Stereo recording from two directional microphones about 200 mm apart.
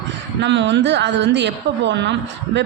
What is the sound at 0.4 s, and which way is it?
A woman's voice, 60° right (ahead or behind).